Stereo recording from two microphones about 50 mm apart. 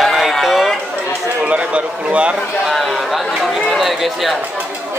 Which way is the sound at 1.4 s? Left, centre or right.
Right.